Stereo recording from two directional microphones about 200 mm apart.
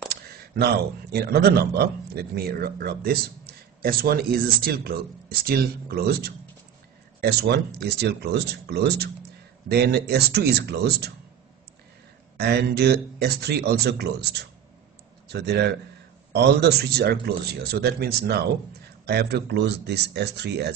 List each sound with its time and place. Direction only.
0.1 s speech: 55° right (ahead or behind)
12.4 s speech: 55° right (ahead or behind)